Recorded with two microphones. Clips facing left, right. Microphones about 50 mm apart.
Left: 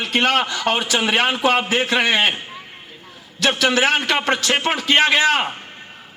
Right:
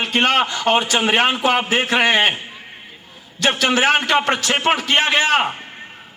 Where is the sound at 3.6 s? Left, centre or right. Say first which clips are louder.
Right 1 dB; right.